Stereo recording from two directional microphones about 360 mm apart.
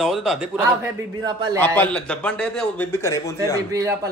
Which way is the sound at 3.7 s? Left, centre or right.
Centre.